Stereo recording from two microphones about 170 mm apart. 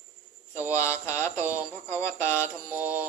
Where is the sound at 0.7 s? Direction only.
15° left (ahead or behind).